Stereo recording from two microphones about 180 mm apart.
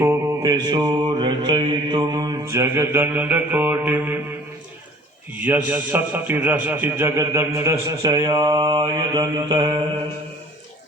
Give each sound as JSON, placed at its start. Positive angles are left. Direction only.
{"t": 0.0, "sound": "mantra", "side_deg": -15}
{"t": 2.5, "sound": "a man's voice", "side_deg": -15}
{"t": 5.4, "sound": "a man's voice", "side_deg": -10}